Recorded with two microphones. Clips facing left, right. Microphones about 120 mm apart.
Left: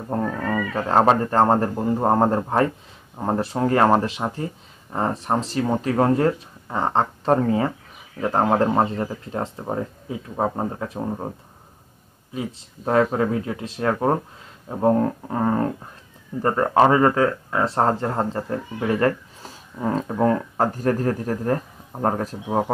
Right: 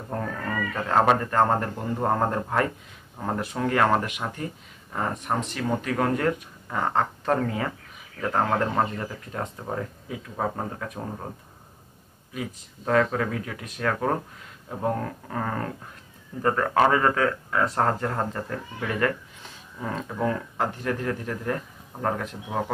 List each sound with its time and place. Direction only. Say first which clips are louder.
0.1 s speech: left 6 dB; 30° left (ahead or behind)
12.4 s speech: left 4 dB; 25° left (ahead or behind)